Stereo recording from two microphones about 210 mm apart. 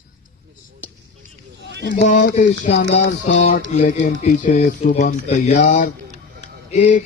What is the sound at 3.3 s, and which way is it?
Speech, 35° left (ahead or behind).